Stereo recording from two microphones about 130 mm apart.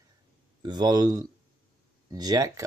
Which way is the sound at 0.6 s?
30° right (ahead or behind).